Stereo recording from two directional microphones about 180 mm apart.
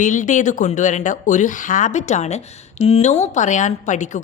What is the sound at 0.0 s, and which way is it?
A woman's voice, 45° left (ahead or behind).